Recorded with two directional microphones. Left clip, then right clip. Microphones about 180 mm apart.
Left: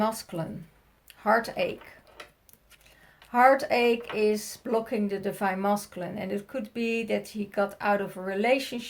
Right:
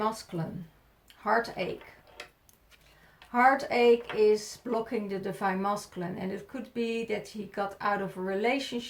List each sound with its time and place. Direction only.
0.0 s speech: 40° left (ahead or behind)
3.3 s speech: 40° left (ahead or behind)